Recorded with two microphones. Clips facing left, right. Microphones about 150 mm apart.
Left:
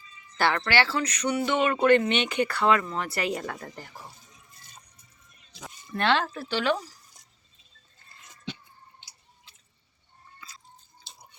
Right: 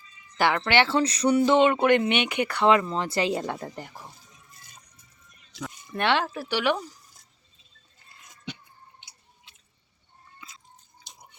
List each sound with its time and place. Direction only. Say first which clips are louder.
0.3 s speech: right 2 dB; 15° right (ahead or behind)
5.9 s speech: even; 15° right (ahead or behind)
11.0 s drip: right 2 dB; 15° right (ahead or behind)